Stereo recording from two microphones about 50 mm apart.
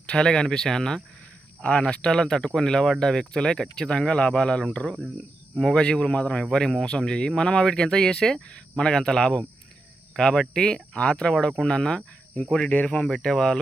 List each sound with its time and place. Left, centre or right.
0.0 s speech: centre
12.6 s speech: left
13.1 s speech: centre